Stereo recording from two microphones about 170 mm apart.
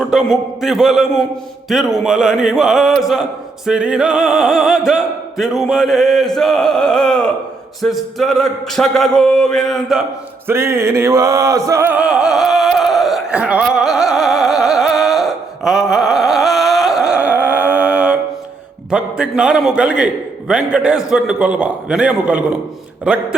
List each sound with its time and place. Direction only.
0.0 s speech: centre (ahead or behind)
10.4 s music: 15° right (ahead or behind)
18.9 s speech: 5° right (ahead or behind)